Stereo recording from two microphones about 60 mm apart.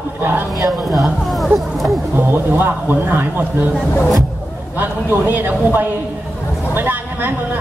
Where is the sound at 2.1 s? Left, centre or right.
Right.